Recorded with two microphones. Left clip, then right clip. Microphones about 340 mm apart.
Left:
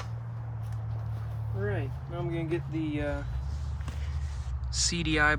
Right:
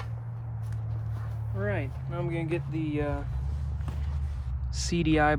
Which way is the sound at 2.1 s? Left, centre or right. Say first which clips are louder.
Right 1 dB; centre.